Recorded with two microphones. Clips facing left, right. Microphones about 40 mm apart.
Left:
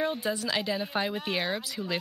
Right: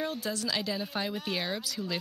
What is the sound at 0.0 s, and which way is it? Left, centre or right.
Speech, centre.